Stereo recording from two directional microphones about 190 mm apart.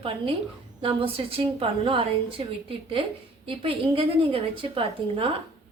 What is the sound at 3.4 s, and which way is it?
A woman's voice, 30° right (ahead or behind).